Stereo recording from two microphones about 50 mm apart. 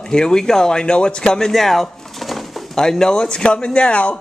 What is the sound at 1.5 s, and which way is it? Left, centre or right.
Speech, centre.